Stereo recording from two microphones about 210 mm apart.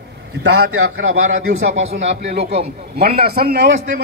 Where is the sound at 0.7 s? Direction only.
80° right.